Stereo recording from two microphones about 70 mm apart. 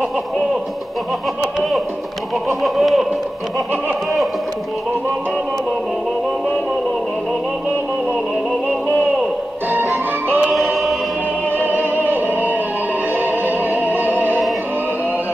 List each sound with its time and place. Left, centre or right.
2.6 s speech: centre
9.7 s music: right
10.5 s choir: centre
11.5 s music: right